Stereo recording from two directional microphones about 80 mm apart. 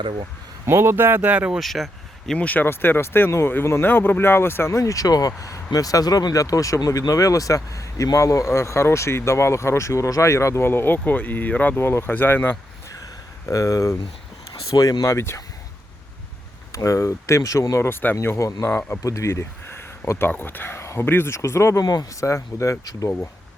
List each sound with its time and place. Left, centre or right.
0.6 s speech: right; by 1.5 s centre
1.5 s speech: centre
2.4 s speech: left
13.5 s speech: left
15.1 s speech: left
16.7 s speech: left
19.0 s speech: left